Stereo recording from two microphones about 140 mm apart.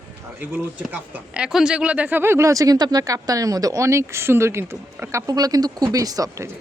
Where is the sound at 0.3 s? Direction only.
10° right (ahead or behind).